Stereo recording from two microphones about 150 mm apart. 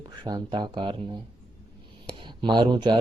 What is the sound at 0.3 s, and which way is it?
Speech, 30° right (ahead or behind).